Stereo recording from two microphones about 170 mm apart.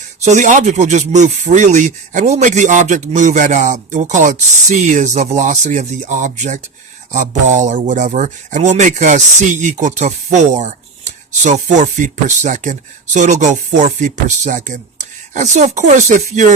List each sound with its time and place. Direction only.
0.3 s speech: 45° right (ahead or behind)